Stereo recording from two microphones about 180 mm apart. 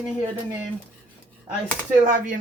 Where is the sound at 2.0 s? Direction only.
45° right (ahead or behind).